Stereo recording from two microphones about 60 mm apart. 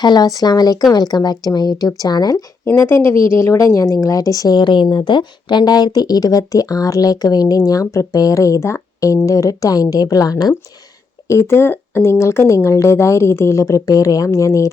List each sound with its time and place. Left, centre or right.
0.2 s speech: left
2.7 s a woman's voice: left
5.6 s a woman's voice: left
11.3 s speech: left